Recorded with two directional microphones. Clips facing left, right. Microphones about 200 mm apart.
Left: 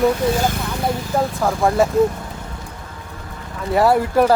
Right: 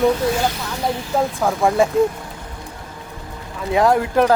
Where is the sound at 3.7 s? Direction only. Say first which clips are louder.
Left 1 dB; 5° left (ahead or behind).